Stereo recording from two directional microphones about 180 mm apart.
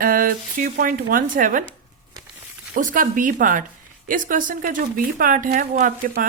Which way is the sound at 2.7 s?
50° right (ahead or behind).